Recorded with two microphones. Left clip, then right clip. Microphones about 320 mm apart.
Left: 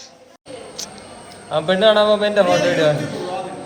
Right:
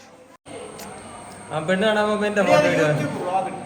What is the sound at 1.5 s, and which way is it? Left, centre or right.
Speech, centre.